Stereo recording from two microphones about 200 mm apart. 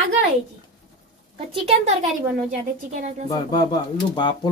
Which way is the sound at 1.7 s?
35° right (ahead or behind).